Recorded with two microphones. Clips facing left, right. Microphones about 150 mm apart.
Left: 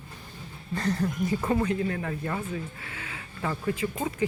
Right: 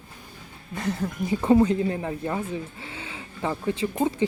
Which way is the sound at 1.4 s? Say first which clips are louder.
Right 9 dB; 25° right (ahead or behind).